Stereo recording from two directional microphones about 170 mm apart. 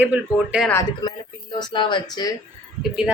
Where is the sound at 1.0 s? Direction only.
25° left (ahead or behind).